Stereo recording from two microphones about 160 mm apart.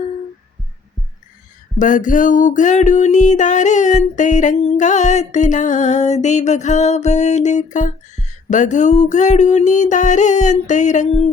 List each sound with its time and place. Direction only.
1.8 s music: 55° left (ahead or behind)